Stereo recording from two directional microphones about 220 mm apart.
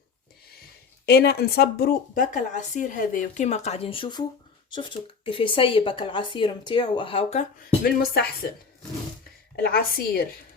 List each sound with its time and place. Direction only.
1.0 s speech: 45° left (ahead or behind); by 7.4 s 30° left (ahead or behind)
7.9 s a woman's voice: 45° left (ahead or behind)
9.6 s a woman's voice: 45° left (ahead or behind)